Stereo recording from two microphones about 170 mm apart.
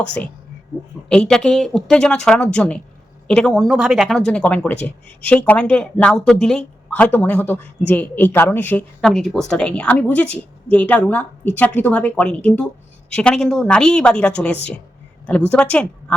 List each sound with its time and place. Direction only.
1.1 s a woman's voice: 5° left (ahead or behind)